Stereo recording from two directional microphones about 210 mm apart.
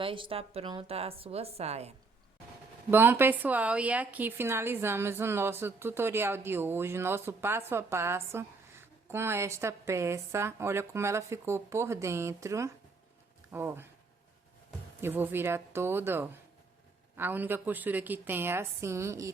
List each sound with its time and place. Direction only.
0.0 s a woman's voice: 25° right (ahead or behind)
2.9 s speech: 10° right (ahead or behind)
15.0 s speech: 10° right (ahead or behind)